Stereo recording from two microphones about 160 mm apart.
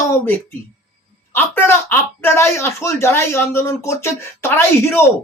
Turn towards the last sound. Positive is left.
turn(degrees=15)  # may be behind; listen again after turning